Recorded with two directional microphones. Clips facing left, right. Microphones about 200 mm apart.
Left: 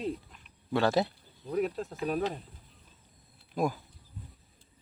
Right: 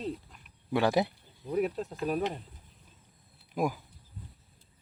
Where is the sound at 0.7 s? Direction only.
15° right (ahead or behind).